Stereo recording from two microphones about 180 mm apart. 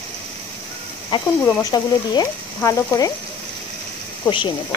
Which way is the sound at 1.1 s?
25° left (ahead or behind).